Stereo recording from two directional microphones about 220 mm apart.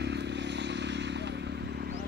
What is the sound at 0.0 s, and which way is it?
Vehicle, 50° right (ahead or behind).